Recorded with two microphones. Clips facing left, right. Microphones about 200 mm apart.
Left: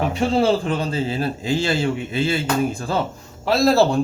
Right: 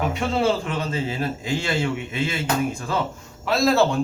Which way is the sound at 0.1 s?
30° left (ahead or behind).